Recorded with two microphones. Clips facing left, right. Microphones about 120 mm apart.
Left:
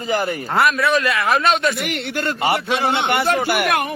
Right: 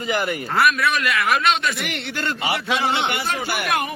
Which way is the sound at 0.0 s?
35° left (ahead or behind).